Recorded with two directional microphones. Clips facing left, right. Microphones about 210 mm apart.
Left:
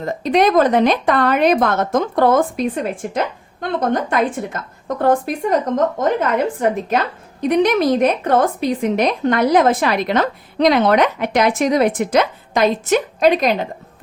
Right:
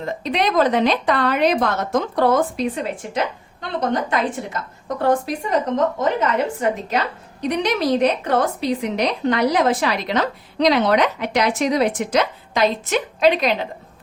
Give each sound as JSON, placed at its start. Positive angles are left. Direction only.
{"t": 0.0, "sound": "a woman's voice", "side_deg": 45}